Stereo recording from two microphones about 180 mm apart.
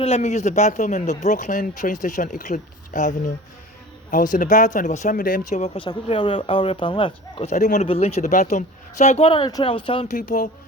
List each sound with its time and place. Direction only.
0.0 s speech: 40° left (ahead or behind)
5.5 s speech: 35° left (ahead or behind)
10.1 s speech: 45° left (ahead or behind)